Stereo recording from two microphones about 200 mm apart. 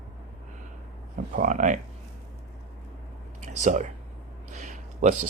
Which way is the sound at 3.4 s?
35° right (ahead or behind).